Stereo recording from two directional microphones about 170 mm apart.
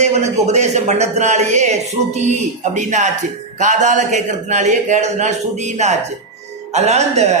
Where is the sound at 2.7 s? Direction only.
45° right (ahead or behind).